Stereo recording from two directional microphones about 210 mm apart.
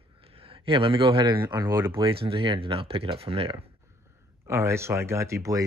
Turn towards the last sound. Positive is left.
turn(degrees=-15)  # may be behind; listen again after turning